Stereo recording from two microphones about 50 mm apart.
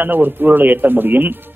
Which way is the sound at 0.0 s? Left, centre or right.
Right.